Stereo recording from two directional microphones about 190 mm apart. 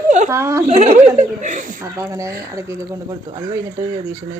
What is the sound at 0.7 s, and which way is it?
A woman's voice, 35° right (ahead or behind).